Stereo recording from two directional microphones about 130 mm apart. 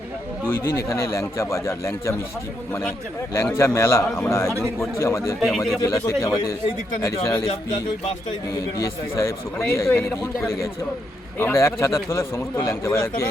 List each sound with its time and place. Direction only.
0.4 s a man's voice: 20° left (ahead or behind)
3.5 s a man's voice: 20° left (ahead or behind)
5.4 s speech: centre (ahead or behind)
5.8 s a man's voice: 25° left (ahead or behind)
7.4 s speech: 45° left (ahead or behind)
8.8 s a man's voice: 25° left (ahead or behind)